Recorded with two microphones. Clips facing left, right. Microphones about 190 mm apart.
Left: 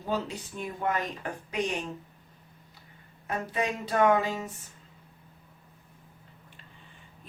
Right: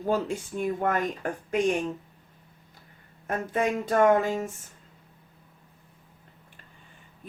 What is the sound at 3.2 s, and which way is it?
A woman's voice, 50° right (ahead or behind).